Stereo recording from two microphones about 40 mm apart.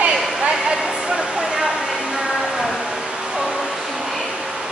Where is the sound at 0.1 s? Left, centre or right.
Centre.